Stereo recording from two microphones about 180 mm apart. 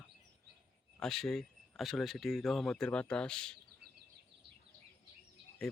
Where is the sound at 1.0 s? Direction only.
Centre (ahead or behind).